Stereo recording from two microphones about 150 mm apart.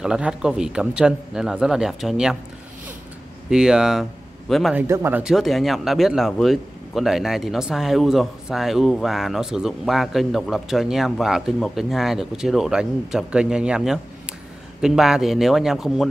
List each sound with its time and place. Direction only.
0.0 s speech: 5° right (ahead or behind)
3.4 s speech: 5° right (ahead or behind)
4.7 s speech: 15° right (ahead or behind)
5.2 s speech: centre (ahead or behind)